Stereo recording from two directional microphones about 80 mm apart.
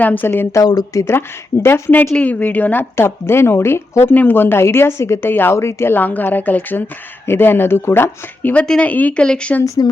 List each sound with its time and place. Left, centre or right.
0.0 s speech: left
0.5 s speech: left
1.1 s speech: left
2.9 s speech: left
8.5 s speech: centre
9.6 s speech: left